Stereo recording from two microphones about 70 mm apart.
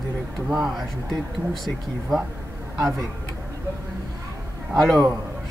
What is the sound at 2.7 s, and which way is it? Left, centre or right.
Speech, right.